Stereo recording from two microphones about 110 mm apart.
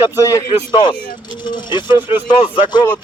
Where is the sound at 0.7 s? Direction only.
45° left (ahead or behind).